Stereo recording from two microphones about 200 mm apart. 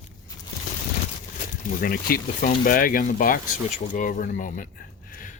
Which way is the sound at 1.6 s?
45° left (ahead or behind).